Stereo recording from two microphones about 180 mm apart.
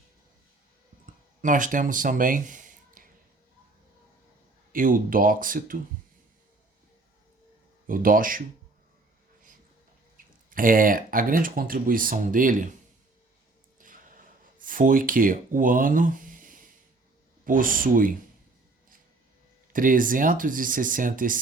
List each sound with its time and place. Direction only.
1.0 s a sound: 45° right (ahead or behind)
4.7 s speech: 50° right (ahead or behind)
7.9 s speech: 50° right (ahead or behind)
10.5 s speech: 50° right (ahead or behind)
13.7 s a sound: 50° right (ahead or behind)
14.6 s speech: 50° right (ahead or behind)
19.7 s speech: 50° right (ahead or behind)